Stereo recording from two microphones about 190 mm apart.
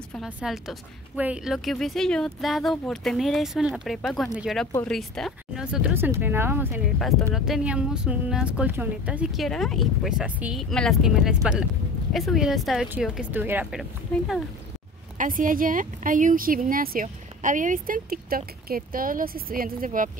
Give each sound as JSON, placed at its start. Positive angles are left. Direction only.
{"t": 0.1, "sound": "speech", "side_deg": 0}
{"t": 7.0, "sound": "speech", "side_deg": 0}
{"t": 15.1, "sound": "speech", "side_deg": -45}